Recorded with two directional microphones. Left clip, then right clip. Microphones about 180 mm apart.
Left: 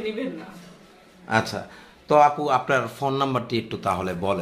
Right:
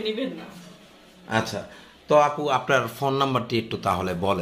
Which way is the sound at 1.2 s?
5° left (ahead or behind).